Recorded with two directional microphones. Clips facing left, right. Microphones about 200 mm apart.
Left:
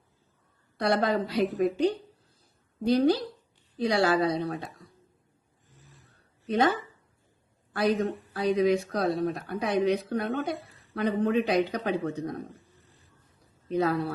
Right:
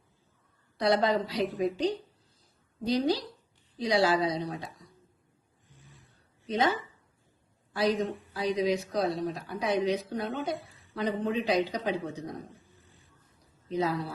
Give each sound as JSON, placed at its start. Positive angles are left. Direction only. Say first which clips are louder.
{"t": 0.8, "sound": "a woman's voice", "louder": "even", "side_deg": 55}
{"t": 1.5, "sound": "speech", "louder": "left 3 dB", "side_deg": 0}
{"t": 1.7, "sound": "a woman's voice", "louder": "left 4 dB", "side_deg": 55}
{"t": 5.7, "sound": "a sound", "louder": "even", "side_deg": 0}
{"t": 7.7, "sound": "speech", "louder": "left 2 dB", "side_deg": 50}
{"t": 7.9, "sound": "speech", "louder": "left 2 dB", "side_deg": 0}
{"t": 8.3, "sound": "speech", "louder": "left 5 dB", "side_deg": 55}
{"t": 10.5, "sound": "a sound", "louder": "even", "side_deg": 0}
{"t": 10.9, "sound": "speech", "louder": "left 4 dB", "side_deg": 60}
{"t": 12.5, "sound": "a sound", "louder": "left 1 dB", "side_deg": 0}
{"t": 13.7, "sound": "speech", "louder": "left 4 dB", "side_deg": 55}